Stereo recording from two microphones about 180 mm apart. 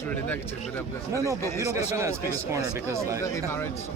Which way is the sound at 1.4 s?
15° left (ahead or behind).